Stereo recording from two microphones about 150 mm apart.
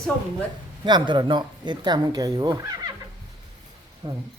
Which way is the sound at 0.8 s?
30° right (ahead or behind).